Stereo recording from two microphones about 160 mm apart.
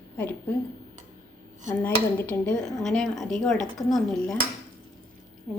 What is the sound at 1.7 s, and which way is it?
Speech, 10° left (ahead or behind).